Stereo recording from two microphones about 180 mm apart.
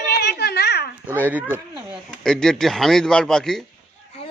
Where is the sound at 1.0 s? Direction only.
10° right (ahead or behind).